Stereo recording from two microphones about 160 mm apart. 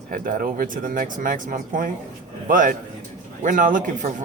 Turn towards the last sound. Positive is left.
turn(degrees=-50)  # may be behind; listen again after turning